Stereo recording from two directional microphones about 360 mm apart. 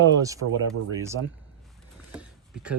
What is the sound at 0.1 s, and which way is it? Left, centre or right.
Speech, centre.